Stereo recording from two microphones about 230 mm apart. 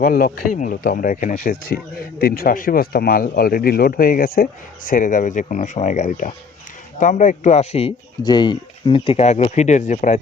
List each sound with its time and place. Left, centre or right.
0.0 s speech: left